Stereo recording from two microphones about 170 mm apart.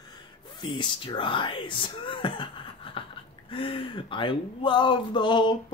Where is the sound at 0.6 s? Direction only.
30° left (ahead or behind).